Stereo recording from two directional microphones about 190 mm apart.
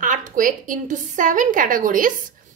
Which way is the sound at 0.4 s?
45° right (ahead or behind).